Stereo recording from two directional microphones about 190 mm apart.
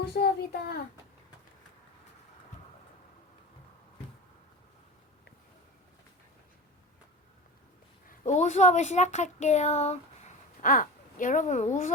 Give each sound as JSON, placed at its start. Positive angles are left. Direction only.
{"t": 0.1, "sound": "a child's voice", "side_deg": 55}
{"t": 8.1, "sound": "speech", "side_deg": 40}